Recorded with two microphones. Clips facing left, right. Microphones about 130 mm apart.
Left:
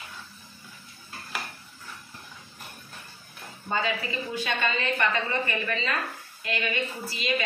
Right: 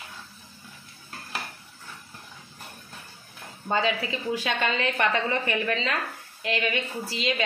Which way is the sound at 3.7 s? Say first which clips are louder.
Right 3 dB; 90° right.